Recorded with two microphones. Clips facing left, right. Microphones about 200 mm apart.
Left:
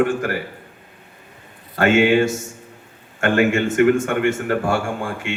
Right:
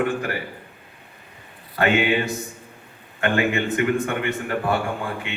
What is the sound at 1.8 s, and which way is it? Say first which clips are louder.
A man's voice: left 5 dB; 45° left (ahead or behind).